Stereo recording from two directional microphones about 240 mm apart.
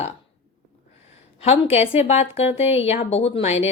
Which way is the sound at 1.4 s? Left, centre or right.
Left.